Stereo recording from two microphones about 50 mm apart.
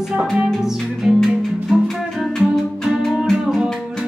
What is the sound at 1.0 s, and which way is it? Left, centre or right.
Music, centre.